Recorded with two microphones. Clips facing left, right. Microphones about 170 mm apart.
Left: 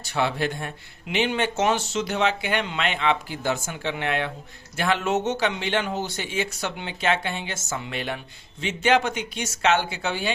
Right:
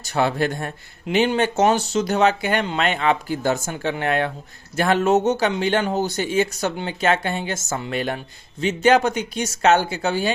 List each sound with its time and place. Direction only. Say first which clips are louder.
0.0 s speech: right 4 dB; 45° right (ahead or behind)